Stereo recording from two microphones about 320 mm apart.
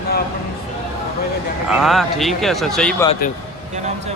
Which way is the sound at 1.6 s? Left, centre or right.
Centre.